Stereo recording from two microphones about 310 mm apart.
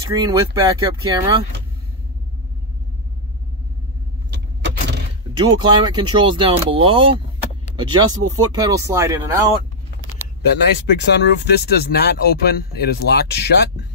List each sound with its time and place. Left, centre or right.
0.1 s speech: centre
4.3 s vehicle: right
5.4 s speech: centre
10.4 s speech: left